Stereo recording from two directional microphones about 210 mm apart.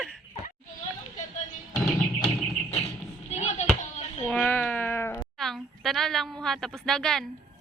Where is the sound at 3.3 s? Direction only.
30° left (ahead or behind).